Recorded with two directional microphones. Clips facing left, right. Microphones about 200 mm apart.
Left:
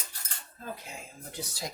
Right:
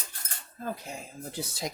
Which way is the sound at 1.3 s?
25° right (ahead or behind).